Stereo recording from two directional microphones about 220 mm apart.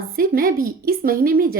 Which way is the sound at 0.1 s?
40° right (ahead or behind).